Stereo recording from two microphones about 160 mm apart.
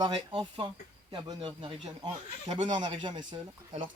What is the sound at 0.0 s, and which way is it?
Speech, 30° right (ahead or behind).